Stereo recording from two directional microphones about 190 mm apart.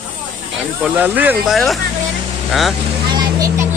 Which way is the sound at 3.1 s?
20° right (ahead or behind).